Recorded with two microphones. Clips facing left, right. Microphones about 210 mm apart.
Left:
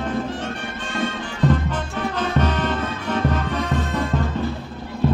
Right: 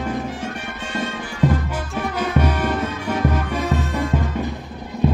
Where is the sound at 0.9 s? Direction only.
10° right (ahead or behind).